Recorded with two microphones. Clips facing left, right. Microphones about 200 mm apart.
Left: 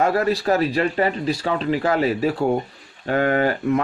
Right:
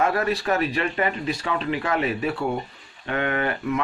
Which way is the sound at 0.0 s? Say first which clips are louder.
Left 3 dB; 35° left (ahead or behind).